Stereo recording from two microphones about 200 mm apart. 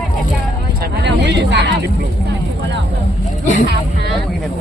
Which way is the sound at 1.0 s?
60° right (ahead or behind).